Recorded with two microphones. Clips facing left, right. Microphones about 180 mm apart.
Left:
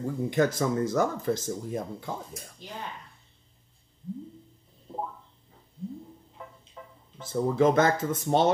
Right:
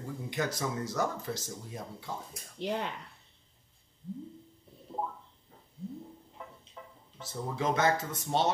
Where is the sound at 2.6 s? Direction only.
70° right (ahead or behind).